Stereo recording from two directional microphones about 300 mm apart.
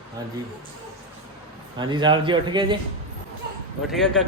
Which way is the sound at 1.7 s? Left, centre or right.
Centre.